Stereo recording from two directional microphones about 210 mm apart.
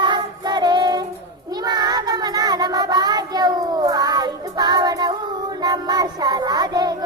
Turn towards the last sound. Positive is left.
turn(degrees=-20)  # may be behind; listen again after turning